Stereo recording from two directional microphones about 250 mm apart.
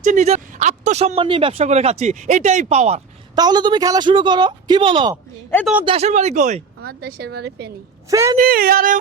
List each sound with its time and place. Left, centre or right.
0.0 s speech: right
5.5 s speech: centre
5.8 s speech: right
8.1 s a man's voice: centre
8.4 s speech: right